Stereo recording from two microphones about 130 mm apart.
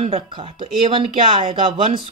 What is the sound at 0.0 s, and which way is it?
Speech, 50° right (ahead or behind).